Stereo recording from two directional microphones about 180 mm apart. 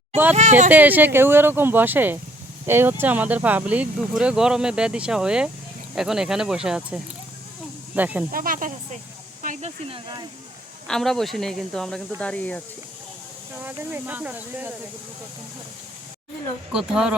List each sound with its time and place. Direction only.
0.7 s speech: 10° right (ahead or behind)
8.3 s speech: 50° right (ahead or behind)
10.8 s speech: centre (ahead or behind)
13.6 s speech: 10° right (ahead or behind)
16.7 s speech: 5° right (ahead or behind)